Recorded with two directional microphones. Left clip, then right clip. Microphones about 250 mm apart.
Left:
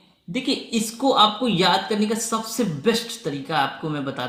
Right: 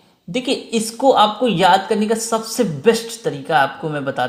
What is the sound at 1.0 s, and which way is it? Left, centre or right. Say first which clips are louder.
Speech: right 4 dB; right.